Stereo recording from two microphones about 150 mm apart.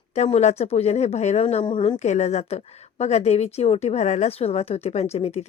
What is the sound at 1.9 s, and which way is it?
Speech, 50° left (ahead or behind).